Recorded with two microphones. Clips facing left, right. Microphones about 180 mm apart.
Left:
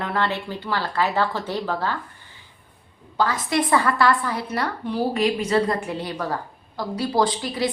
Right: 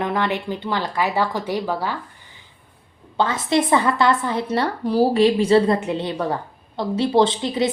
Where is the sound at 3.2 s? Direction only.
25° right (ahead or behind).